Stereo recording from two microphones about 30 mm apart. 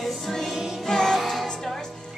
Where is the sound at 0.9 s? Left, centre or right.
Centre.